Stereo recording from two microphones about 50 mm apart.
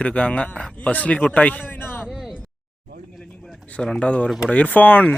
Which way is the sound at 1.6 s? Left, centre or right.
Left.